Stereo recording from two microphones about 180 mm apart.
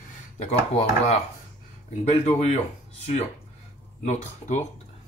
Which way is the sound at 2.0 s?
35° left (ahead or behind).